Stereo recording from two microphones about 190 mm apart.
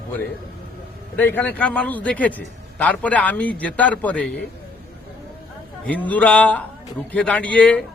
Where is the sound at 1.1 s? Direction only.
10° left (ahead or behind).